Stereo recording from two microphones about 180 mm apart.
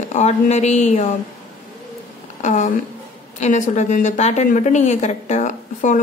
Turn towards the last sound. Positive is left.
turn(degrees=40)  # may be behind; listen again after turning